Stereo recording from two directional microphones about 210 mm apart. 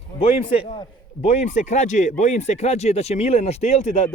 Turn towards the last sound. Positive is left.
turn(degrees=30)  # may be behind; listen again after turning